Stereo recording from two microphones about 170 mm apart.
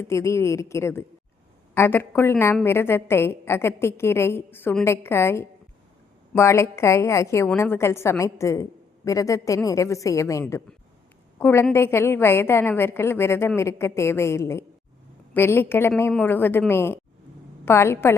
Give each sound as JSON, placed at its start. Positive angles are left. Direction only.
{"t": 0.0, "sound": "a woman's voice", "side_deg": 15}